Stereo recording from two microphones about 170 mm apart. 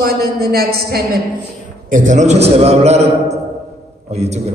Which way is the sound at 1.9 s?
50° right (ahead or behind).